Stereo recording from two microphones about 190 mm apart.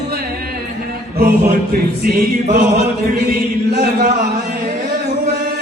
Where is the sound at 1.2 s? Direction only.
55° right (ahead or behind).